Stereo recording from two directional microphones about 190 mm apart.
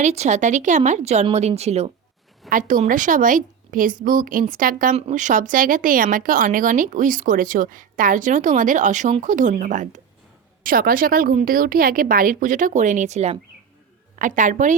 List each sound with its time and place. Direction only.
0.0 s speech: 35° right (ahead or behind)
2.5 s a woman's voice: 45° right (ahead or behind)